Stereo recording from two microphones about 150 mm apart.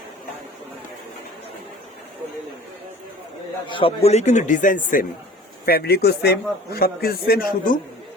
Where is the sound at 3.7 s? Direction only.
35° left (ahead or behind); by 5.0 s 65° left (ahead or behind).